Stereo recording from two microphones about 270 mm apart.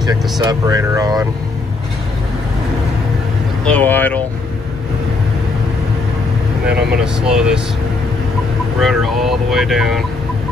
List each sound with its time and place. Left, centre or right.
0.0 s speech: centre
3.6 s speech: centre
6.7 s speech: centre
8.7 s speech: centre